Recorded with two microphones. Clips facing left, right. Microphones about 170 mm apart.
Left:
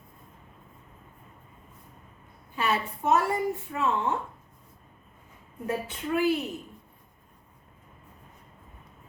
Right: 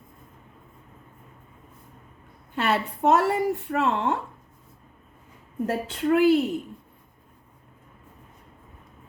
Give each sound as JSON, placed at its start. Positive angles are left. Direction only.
{"t": 2.6, "sound": "a woman's voice", "side_deg": -70}
{"t": 5.6, "sound": "a woman's voice", "side_deg": -70}